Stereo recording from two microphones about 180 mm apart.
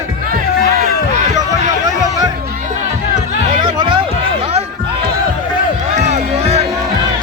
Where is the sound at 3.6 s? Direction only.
25° right (ahead or behind).